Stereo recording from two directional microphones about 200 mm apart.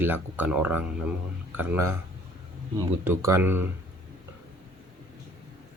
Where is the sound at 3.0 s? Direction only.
15° right (ahead or behind).